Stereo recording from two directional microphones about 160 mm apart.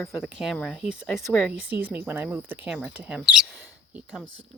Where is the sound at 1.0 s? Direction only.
5° left (ahead or behind).